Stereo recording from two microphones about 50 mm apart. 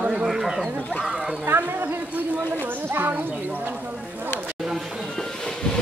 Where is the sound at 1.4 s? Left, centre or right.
Right.